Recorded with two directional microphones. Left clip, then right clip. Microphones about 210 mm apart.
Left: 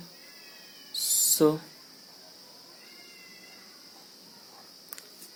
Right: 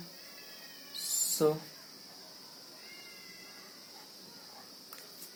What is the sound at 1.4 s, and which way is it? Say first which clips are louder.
Speech: left 5 dB; 60° left (ahead or behind).